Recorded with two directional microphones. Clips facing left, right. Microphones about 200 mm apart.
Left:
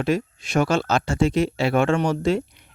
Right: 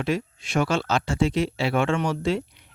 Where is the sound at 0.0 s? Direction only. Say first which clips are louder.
Left 3 dB; 45° left (ahead or behind).